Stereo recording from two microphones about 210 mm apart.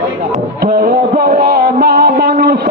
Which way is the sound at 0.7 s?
45° right (ahead or behind).